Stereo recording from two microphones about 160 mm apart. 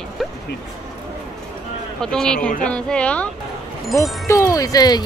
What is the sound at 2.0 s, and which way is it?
A man's voice, 5° left (ahead or behind).